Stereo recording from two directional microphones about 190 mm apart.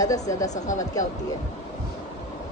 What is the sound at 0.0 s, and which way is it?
Speech, 20° left (ahead or behind).